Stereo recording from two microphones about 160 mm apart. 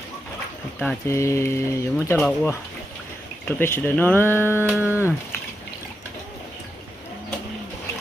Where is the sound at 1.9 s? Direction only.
5° left (ahead or behind).